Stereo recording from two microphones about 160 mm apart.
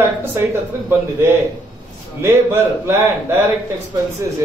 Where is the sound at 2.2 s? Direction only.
15° right (ahead or behind).